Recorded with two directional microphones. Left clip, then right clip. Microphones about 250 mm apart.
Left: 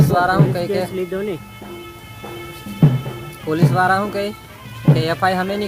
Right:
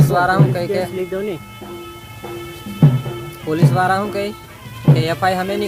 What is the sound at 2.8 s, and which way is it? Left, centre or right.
Music, right.